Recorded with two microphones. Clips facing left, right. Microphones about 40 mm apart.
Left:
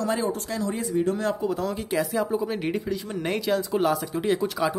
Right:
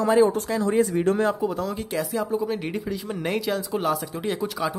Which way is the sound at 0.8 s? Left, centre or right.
Right.